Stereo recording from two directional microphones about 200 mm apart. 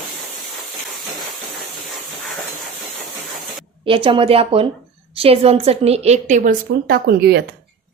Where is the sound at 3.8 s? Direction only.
25° right (ahead or behind); by 7.5 s 50° right (ahead or behind).